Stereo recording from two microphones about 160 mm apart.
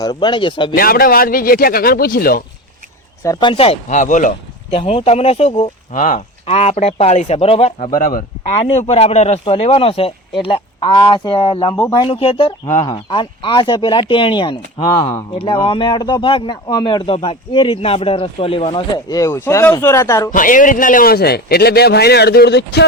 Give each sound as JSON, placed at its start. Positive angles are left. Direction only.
{"t": 0.0, "sound": "speech", "side_deg": 25}
{"t": 0.8, "sound": "speech", "side_deg": 65}
{"t": 3.2, "sound": "speech", "side_deg": 35}
{"t": 3.9, "sound": "speech", "side_deg": 50}
{"t": 4.7, "sound": "speech", "side_deg": 35}
{"t": 5.9, "sound": "speech", "side_deg": 55}
{"t": 6.4, "sound": "speech", "side_deg": 40}
{"t": 8.6, "sound": "speech", "side_deg": 40}
{"t": 20.3, "sound": "a man's voice", "side_deg": 55}